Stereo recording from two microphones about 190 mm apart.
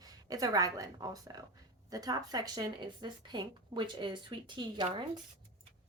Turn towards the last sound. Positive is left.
turn(degrees=-25)  # may be behind; listen again after turning